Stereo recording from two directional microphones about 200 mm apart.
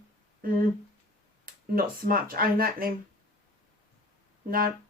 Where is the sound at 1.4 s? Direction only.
45° right (ahead or behind).